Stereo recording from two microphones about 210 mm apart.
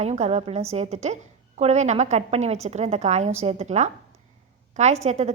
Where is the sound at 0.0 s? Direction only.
30° right (ahead or behind).